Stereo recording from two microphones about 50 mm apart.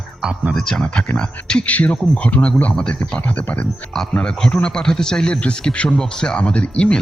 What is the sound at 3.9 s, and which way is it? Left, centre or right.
Speech, centre.